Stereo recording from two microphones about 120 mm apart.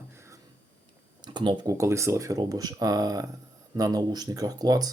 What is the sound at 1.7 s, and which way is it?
Speech, 25° right (ahead or behind).